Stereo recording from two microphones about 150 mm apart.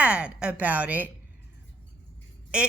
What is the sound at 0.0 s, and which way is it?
A woman's voice, 10° right (ahead or behind).